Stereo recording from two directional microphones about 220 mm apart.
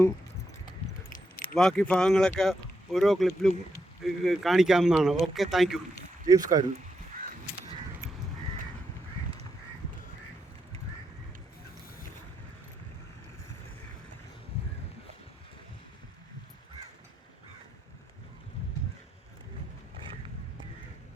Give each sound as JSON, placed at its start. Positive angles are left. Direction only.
{"t": 1.5, "sound": "speech", "side_deg": 5}
{"t": 6.2, "sound": "speech", "side_deg": -15}